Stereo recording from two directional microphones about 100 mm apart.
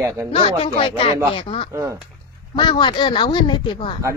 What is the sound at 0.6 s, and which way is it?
Speech, 65° left (ahead or behind).